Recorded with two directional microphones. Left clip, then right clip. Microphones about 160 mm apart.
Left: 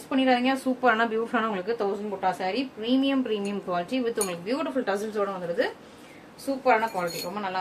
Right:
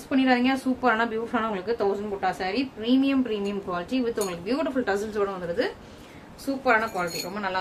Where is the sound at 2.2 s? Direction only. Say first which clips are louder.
Left 2 dB; 25° right (ahead or behind).